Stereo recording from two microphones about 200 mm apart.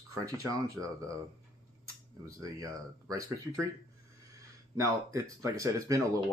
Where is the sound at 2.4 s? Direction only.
15° right (ahead or behind).